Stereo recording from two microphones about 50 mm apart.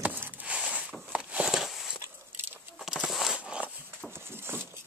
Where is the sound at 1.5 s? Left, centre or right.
Centre.